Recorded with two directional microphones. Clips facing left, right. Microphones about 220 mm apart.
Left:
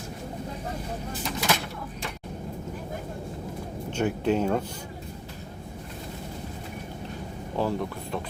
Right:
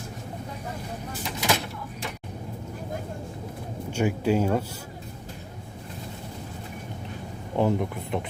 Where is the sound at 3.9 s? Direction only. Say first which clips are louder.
Right 1 dB; 10° right (ahead or behind).